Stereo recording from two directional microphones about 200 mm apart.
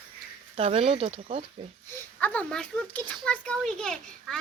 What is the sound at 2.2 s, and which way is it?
A child's voice, 5° left (ahead or behind).